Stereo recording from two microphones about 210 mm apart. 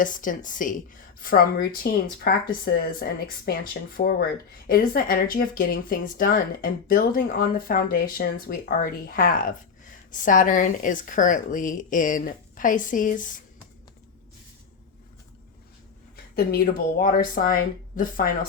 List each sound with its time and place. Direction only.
0.0 s a woman's voice: 40° left (ahead or behind)
16.3 s a woman's voice: 45° left (ahead or behind)